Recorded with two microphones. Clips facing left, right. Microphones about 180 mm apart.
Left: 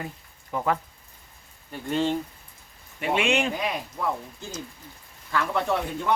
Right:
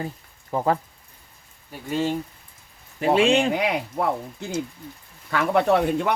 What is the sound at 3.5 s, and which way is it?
Speech, 70° right (ahead or behind).